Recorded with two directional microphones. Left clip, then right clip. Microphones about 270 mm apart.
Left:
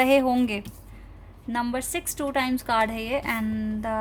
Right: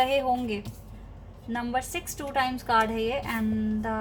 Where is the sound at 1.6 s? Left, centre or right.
Left.